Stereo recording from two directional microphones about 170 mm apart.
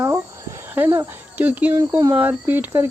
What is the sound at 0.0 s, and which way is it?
Speech, 15° right (ahead or behind).